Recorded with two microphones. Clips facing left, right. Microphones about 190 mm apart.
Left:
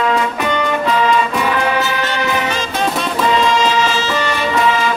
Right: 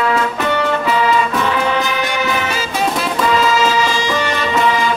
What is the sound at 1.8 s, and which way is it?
Music, 15° right (ahead or behind).